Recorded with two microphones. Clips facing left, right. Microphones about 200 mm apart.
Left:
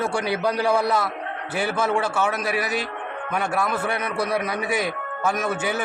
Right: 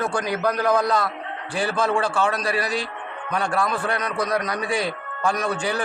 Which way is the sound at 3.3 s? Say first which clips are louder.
Right 1 dB; 20° left (ahead or behind).